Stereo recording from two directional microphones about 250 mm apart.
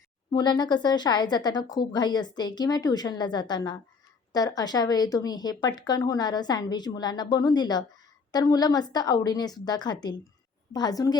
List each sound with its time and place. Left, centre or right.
0.3 s speech: centre